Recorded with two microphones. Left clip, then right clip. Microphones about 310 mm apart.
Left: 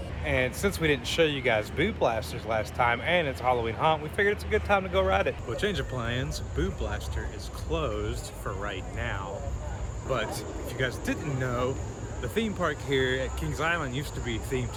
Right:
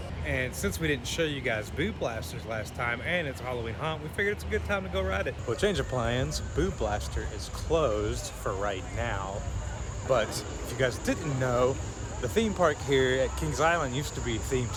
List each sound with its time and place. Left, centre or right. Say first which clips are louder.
0.3 s speech: left 4 dB; centre